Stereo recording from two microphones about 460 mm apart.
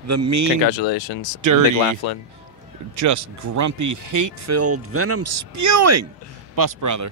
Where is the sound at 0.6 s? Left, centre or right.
Left.